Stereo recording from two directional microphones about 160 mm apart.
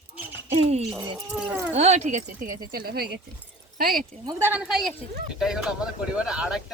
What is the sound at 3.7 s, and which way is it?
Speech, 60° right (ahead or behind).